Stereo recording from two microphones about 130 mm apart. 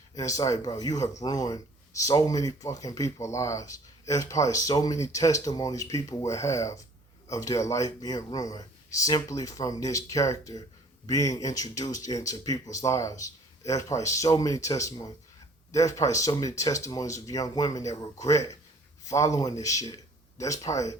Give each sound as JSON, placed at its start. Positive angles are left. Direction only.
{"t": 0.1, "sound": "speech", "side_deg": 25}